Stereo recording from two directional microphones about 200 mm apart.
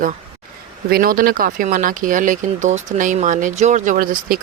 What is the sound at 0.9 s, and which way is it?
Speech, 50° right (ahead or behind).